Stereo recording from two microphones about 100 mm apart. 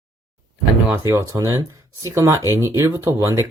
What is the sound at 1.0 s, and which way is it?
Speech, 30° right (ahead or behind).